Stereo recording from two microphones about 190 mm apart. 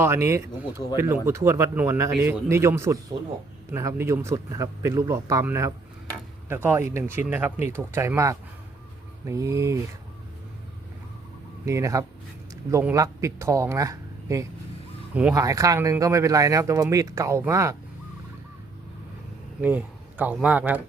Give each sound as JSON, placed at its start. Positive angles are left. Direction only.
{"t": 0.0, "sound": "speech", "side_deg": -15}
{"t": 11.6, "sound": "speech", "side_deg": -15}
{"t": 19.6, "sound": "a man's voice", "side_deg": -10}